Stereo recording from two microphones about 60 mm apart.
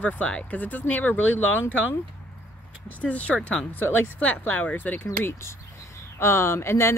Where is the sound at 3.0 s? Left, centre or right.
Left.